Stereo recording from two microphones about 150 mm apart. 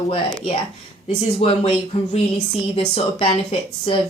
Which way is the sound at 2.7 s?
40° left (ahead or behind).